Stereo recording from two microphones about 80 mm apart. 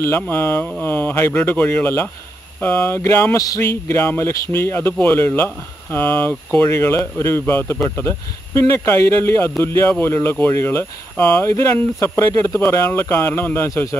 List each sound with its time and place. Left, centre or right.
0.0 s speech: left
3.0 s speech: left
3.3 s speech: left
3.8 s speech: left
11.5 s speech: left
12.5 s speech: left